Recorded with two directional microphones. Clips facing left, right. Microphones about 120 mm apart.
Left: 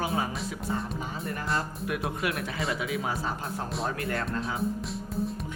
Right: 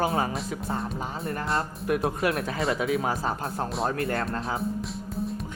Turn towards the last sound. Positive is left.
turn(degrees=-35)  # may be behind; listen again after turning